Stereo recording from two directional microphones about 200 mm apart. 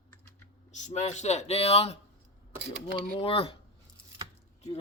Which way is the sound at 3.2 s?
30° left (ahead or behind).